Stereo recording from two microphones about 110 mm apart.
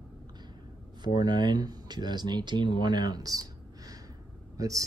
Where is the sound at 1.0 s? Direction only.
40° right (ahead or behind).